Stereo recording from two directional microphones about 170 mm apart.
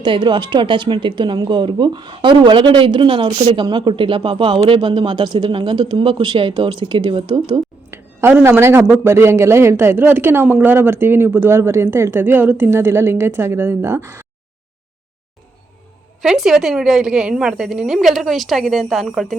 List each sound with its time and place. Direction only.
0.0 s speech: 25° right (ahead or behind)
7.9 s a sound: 15° right (ahead or behind)
9.0 s a man's voice: 15° right (ahead or behind)
16.2 s a woman's voice: centre (ahead or behind)